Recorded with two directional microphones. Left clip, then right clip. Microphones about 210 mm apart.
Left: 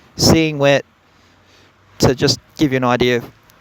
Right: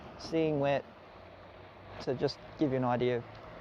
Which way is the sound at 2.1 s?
90° left.